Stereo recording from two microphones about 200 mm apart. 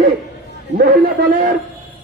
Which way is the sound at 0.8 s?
55° right (ahead or behind).